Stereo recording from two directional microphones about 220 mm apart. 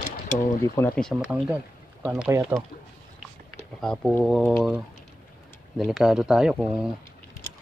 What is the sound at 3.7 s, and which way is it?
Speech, 5° left (ahead or behind).